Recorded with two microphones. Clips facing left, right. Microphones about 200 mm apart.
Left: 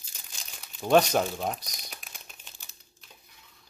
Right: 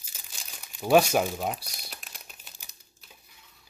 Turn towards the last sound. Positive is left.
turn(degrees=-5)  # may be behind; listen again after turning